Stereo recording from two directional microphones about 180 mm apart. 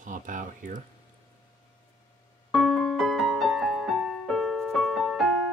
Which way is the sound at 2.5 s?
Centre (ahead or behind).